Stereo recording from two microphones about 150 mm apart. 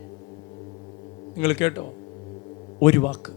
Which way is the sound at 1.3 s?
20° left (ahead or behind).